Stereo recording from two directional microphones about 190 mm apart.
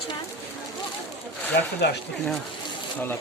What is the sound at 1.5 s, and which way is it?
Speech, 65° left (ahead or behind).